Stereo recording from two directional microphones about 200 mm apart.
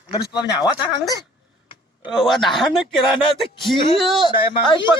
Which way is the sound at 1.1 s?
25° left (ahead or behind).